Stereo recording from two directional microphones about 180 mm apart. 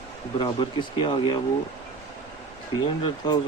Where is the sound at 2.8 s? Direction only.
25° left (ahead or behind).